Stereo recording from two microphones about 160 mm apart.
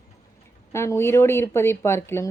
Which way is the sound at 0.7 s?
15° left (ahead or behind).